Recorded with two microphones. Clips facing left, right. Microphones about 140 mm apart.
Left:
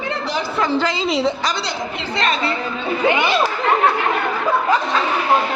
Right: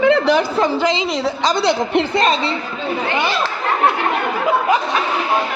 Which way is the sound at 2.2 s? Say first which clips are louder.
Right 3 dB; 30° right (ahead or behind).